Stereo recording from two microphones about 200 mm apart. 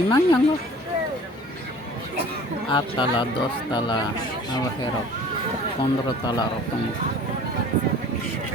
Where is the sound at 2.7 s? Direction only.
25° left (ahead or behind).